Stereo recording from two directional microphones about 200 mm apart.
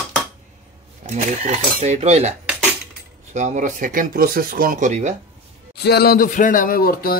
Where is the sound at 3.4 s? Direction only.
40° right (ahead or behind).